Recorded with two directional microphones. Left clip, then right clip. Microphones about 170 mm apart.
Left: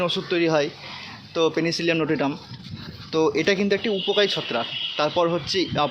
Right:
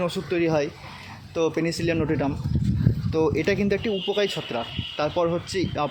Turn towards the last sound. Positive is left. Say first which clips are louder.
# left 4 dB
turn(degrees=-10)  # may be behind; listen again after turning